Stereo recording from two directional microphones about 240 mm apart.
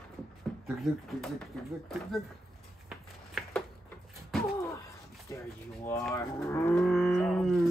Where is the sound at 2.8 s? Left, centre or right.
Centre.